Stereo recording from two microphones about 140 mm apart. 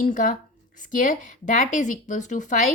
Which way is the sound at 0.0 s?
75° left (ahead or behind).